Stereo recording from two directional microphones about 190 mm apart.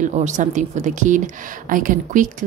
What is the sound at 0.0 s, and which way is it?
Speech, 40° right (ahead or behind).